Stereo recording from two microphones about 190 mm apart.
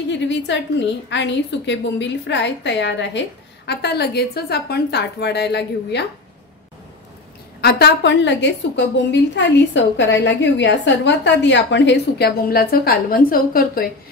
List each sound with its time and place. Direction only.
0.1 s a woman's voice: 70° left (ahead or behind)
7.6 s a woman's voice: 65° left (ahead or behind)